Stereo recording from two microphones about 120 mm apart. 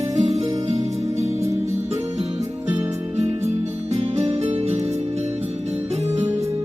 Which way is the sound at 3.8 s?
55° right (ahead or behind).